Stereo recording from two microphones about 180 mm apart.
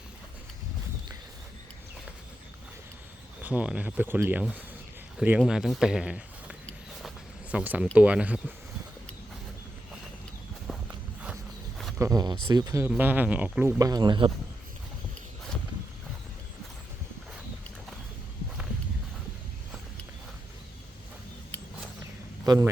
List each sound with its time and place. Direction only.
3.4 s speech: 5° right (ahead or behind)
10.7 s walk: centre (ahead or behind)
11.9 s speech: 20° right (ahead or behind)
22.4 s a man's voice: 15° right (ahead or behind)